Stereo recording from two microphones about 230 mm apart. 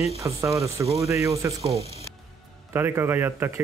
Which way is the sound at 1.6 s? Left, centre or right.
Right.